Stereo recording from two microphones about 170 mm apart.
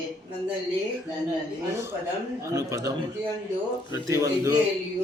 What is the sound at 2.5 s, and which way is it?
Speech, 20° right (ahead or behind).